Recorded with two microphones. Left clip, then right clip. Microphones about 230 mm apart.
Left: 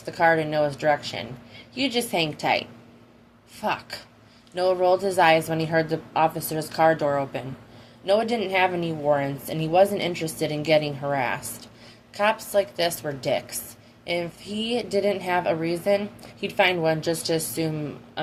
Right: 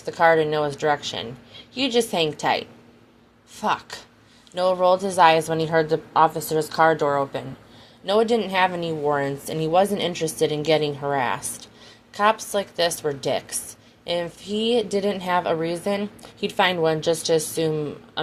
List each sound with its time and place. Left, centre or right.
0.0 s a woman's voice: right
3.6 s a woman's voice: right
11.3 s speech: right
12.1 s a woman's voice: right